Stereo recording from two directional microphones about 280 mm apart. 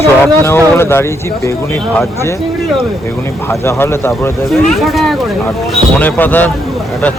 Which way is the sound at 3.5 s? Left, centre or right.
Centre.